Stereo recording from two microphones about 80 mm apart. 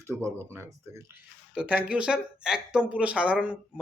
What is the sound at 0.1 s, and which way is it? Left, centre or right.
Speech, right.